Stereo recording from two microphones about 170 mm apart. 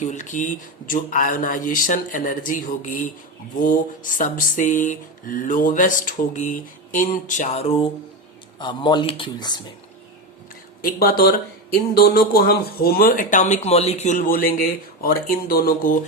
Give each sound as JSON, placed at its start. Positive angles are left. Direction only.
{"t": 0.0, "sound": "a sound", "side_deg": 45}
{"t": 8.5, "sound": "a man's voice", "side_deg": 25}
{"t": 10.8, "sound": "speech", "side_deg": 65}